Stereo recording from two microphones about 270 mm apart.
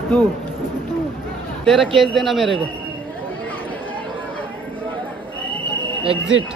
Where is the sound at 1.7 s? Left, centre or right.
Centre.